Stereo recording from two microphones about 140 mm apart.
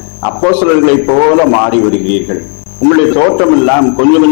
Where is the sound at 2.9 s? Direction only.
15° left (ahead or behind).